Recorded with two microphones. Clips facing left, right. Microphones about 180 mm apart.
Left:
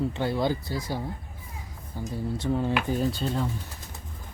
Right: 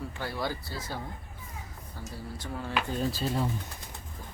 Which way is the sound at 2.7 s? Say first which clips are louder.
Left 4 dB; centre (ahead or behind).